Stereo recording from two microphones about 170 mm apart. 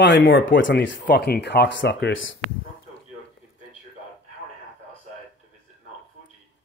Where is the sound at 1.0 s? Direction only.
70° left (ahead or behind); by 2.2 s 90° left.